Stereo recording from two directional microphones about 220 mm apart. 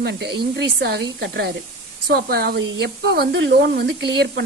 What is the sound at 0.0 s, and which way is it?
Speech, 50° right (ahead or behind).